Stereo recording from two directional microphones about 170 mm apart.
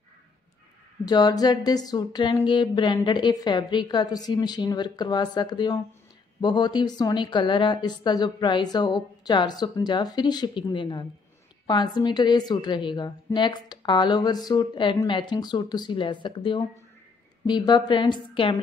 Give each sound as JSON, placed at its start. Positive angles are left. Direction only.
{"t": 1.0, "sound": "speech", "side_deg": 25}